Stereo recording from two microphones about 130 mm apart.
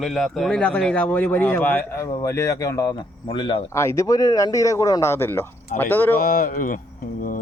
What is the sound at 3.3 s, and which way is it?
Speech, 40° left (ahead or behind).